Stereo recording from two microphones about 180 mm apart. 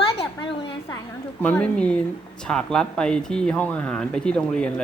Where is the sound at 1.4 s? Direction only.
5° left (ahead or behind).